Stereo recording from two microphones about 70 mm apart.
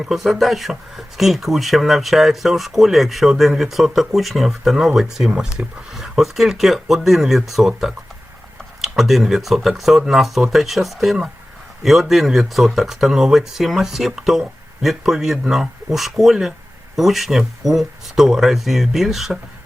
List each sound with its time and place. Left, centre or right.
0.0 s speech: centre